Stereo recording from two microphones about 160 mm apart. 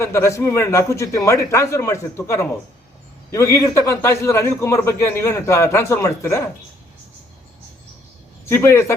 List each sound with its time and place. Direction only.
0.0 s a man's voice: 20° left (ahead or behind)
8.4 s a man's voice: 15° left (ahead or behind)